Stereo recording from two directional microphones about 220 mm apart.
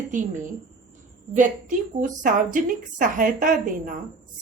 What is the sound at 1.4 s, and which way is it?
A woman's voice, 35° right (ahead or behind).